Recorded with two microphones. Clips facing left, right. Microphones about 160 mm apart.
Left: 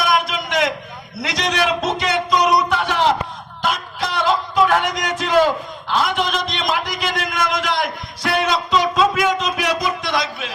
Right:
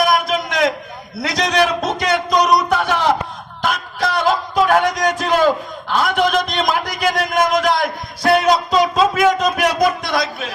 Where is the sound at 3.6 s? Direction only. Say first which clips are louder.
Right 2 dB; 50° right (ahead or behind).